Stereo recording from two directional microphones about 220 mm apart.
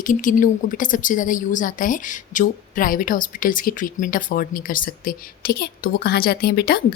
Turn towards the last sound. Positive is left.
turn(degrees=45)  # may be behind; listen again after turning